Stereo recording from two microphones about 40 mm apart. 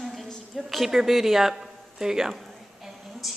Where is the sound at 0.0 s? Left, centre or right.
Centre.